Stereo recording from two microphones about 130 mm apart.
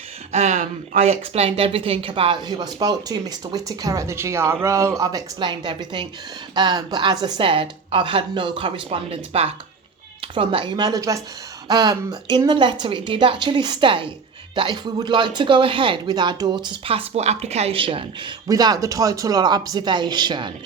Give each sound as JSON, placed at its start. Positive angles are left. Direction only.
{"t": 0.3, "sound": "speech", "side_deg": -75}
{"t": 1.0, "sound": "speech", "side_deg": -55}
{"t": 2.5, "sound": "speech", "side_deg": -30}